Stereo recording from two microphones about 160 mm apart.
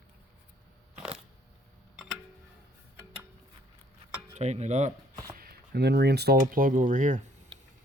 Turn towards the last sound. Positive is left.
turn(degrees=-50)  # may be behind; listen again after turning